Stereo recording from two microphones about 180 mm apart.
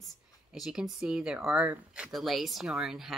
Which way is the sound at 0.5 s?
5° right (ahead or behind).